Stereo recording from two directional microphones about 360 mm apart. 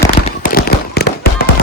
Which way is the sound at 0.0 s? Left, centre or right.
Centre.